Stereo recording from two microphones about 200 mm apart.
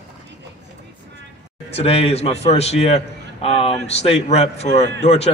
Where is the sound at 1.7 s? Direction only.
30° left (ahead or behind).